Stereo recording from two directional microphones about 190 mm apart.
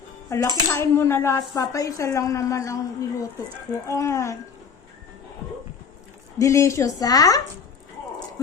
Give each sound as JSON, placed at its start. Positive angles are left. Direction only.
{"t": 0.3, "sound": "a woman's voice", "side_deg": 15}
{"t": 6.4, "sound": "a woman's voice", "side_deg": 15}